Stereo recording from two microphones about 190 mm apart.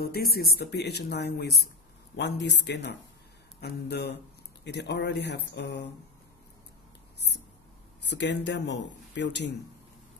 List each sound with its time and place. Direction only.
0.0 s speech: 55° left (ahead or behind)
8.0 s speech: 65° left (ahead or behind)